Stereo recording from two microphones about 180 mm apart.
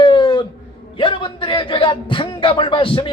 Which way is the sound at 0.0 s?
25° left (ahead or behind).